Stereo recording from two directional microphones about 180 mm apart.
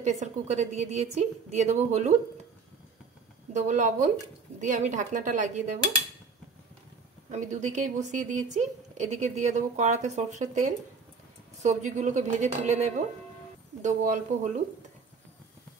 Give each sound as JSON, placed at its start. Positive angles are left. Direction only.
{"t": 0.0, "sound": "a woman's voice", "side_deg": -40}
{"t": 3.5, "sound": "speech", "side_deg": -40}
{"t": 7.2, "sound": "a woman's voice", "side_deg": -40}